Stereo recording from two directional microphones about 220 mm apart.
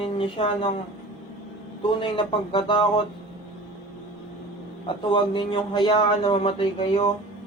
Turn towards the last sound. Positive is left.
turn(degrees=25)  # may be behind; listen again after turning